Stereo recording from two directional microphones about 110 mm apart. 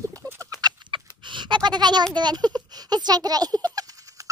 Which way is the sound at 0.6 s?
45° right (ahead or behind).